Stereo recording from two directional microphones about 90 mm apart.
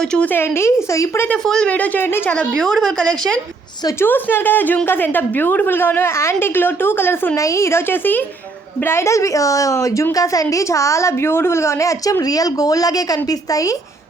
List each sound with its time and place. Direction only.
0.0 s speech: 10° left (ahead or behind)
0.3 s a woman's voice: 25° left (ahead or behind)
1.3 s speech: 10° left (ahead or behind)
2.3 s speech: 10° left (ahead or behind)
4.0 s a woman's voice: 25° left (ahead or behind)
7.3 s a woman's voice: 35° left (ahead or behind)